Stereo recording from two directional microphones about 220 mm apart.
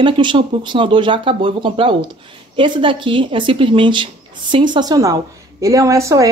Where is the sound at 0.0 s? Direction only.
20° right (ahead or behind).